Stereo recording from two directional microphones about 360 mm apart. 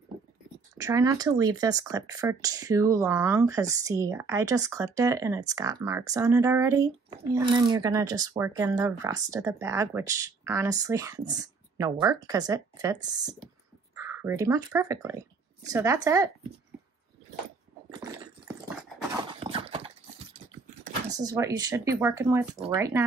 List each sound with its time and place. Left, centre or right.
0.7 s speech: centre
19.4 s horse: centre
21.1 s speech: centre